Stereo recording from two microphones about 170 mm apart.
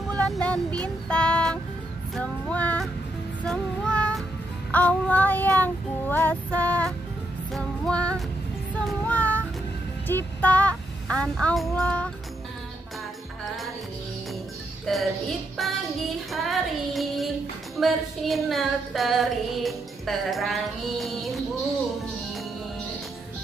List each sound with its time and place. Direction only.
0.3 s female singing: 5° left (ahead or behind)
2.1 s child singing: 10° left (ahead or behind)
7.5 s music: 5° left (ahead or behind)
8.8 s child singing: 10° left (ahead or behind)
10.0 s music: 10° left (ahead or behind)
14.9 s music: centre (ahead or behind)
16.3 s child singing: centre (ahead or behind)
17.7 s female singing: centre (ahead or behind)